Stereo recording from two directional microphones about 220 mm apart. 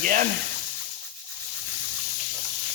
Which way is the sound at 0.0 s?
40° right (ahead or behind).